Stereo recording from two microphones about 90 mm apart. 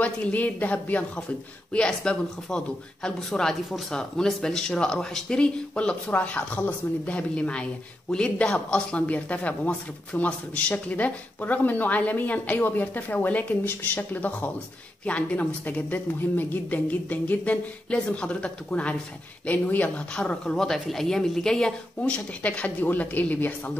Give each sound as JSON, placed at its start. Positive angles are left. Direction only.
{"t": 0.0, "sound": "speech", "side_deg": 15}